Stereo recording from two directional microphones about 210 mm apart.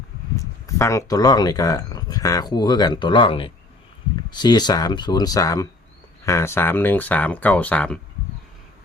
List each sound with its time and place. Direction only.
0.3 s speech: 15° left (ahead or behind)